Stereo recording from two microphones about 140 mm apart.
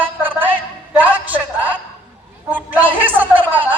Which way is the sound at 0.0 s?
15° right (ahead or behind).